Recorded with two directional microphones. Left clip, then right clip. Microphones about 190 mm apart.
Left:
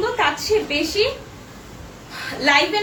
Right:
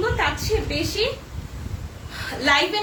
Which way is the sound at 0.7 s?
10° right (ahead or behind).